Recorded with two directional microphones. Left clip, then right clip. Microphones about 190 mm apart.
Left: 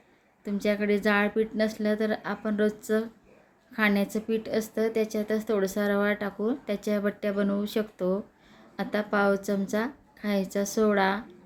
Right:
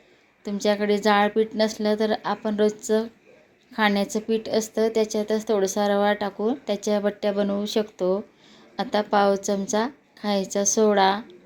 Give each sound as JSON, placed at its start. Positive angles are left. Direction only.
{"t": 0.4, "sound": "a woman's voice", "side_deg": -10}